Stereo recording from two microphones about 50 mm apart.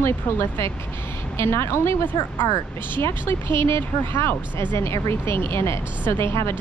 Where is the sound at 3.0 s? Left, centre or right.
Left.